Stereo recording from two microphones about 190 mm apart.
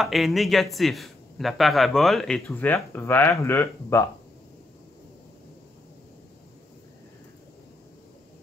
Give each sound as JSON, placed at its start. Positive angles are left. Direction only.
{"t": 0.0, "sound": "speech", "side_deg": 0}